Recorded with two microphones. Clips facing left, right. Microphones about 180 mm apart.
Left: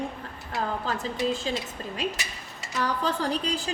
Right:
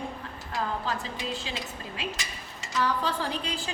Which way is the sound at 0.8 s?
40° left (ahead or behind).